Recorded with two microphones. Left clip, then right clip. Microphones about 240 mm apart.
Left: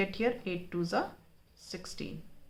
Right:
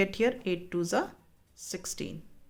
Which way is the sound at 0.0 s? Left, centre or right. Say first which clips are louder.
Right 4 dB; right.